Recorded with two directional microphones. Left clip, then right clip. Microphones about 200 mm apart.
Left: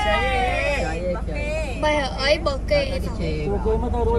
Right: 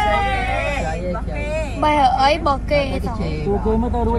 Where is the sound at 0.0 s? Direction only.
15° left (ahead or behind).